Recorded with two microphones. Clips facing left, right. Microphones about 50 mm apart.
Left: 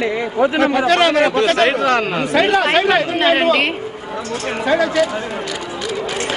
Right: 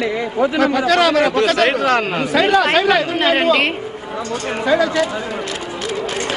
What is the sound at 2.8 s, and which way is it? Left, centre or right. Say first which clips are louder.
Speech: even; left.